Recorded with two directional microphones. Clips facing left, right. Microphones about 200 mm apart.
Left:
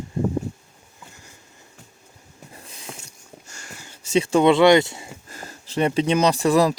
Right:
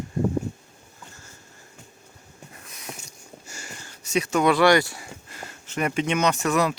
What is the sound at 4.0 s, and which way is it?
Speech, 30° left (ahead or behind).